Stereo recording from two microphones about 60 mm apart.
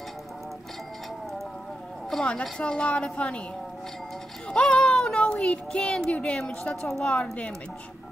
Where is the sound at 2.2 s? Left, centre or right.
Centre.